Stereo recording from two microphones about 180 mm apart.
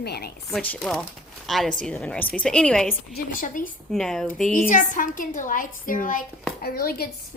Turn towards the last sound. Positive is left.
turn(degrees=55)  # may be behind; listen again after turning